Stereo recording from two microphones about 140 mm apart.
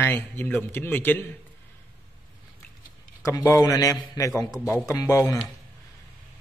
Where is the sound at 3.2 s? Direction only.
25° left (ahead or behind).